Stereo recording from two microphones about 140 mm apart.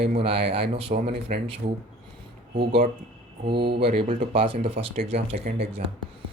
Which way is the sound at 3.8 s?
40° right (ahead or behind).